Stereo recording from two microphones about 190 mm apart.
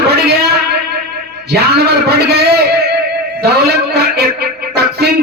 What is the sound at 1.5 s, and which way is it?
A man's voice, 60° right (ahead or behind).